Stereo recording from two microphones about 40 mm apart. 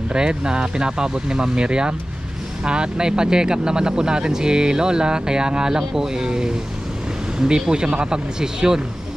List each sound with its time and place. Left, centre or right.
0.1 s speech: right